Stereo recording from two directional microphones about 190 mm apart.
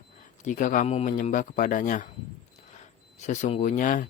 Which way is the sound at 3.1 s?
40° left (ahead or behind).